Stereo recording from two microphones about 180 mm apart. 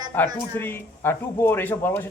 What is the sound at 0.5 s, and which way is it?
Speech, 10° left (ahead or behind).